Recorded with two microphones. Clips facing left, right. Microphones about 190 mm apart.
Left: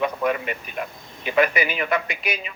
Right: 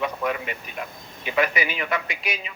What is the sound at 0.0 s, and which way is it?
Vehicle, 50° left (ahead or behind).